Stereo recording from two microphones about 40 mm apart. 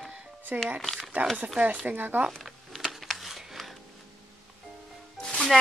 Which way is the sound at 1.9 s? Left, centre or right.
Right.